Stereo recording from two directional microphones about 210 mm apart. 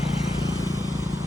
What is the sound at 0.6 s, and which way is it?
Vehicle, 15° left (ahead or behind).